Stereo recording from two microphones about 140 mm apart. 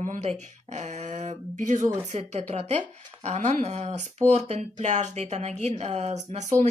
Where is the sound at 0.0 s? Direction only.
60° right (ahead or behind).